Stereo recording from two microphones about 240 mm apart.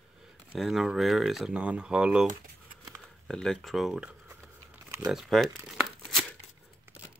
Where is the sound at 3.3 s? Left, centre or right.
Centre.